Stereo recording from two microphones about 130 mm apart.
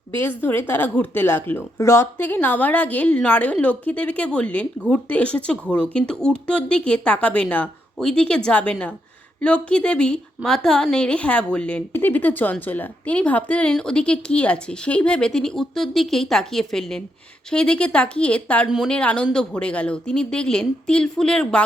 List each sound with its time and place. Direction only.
0.2 s a woman's voice: 15° left (ahead or behind)